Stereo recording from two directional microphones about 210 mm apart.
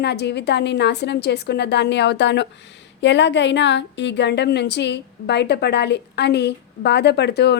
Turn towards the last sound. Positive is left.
turn(degrees=50)  # may be behind; listen again after turning